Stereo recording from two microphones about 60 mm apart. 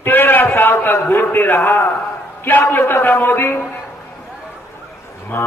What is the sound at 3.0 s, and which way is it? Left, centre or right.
Mantra, left.